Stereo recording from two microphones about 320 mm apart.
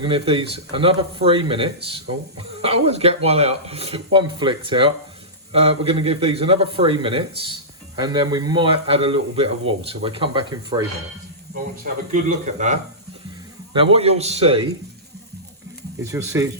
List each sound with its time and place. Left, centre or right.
0.0 s a man's voice: centre
12.1 s a man's voice: right
16.0 s a man's voice: centre